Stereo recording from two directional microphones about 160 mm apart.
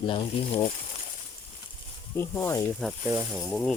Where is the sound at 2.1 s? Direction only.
15° left (ahead or behind).